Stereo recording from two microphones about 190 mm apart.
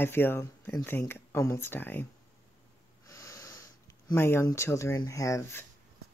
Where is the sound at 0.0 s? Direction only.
10° left (ahead or behind).